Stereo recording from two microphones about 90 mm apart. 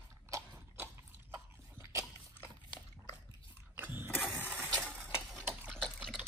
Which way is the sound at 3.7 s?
25° right (ahead or behind).